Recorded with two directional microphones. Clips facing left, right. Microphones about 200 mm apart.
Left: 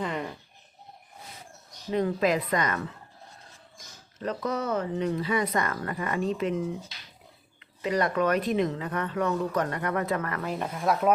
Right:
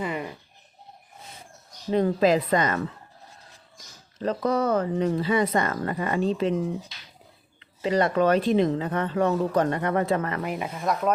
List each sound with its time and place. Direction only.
0.0 s a sound: 5° right (ahead or behind)
1.9 s speech: 30° right (ahead or behind)
4.2 s speech: 35° right (ahead or behind)
7.8 s speech: 30° right (ahead or behind); by 10.8 s 10° right (ahead or behind)